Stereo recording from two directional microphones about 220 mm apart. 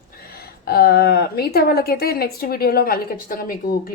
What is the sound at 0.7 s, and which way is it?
A woman's voice, 45° left (ahead or behind).